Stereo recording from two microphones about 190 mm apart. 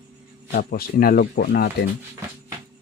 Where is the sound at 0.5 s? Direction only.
50° left (ahead or behind).